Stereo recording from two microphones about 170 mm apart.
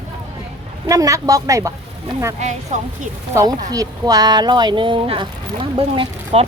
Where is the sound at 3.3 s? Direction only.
20° right (ahead or behind); by 6.4 s 35° right (ahead or behind).